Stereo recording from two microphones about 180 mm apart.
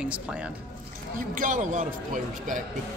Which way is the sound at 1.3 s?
45° right (ahead or behind).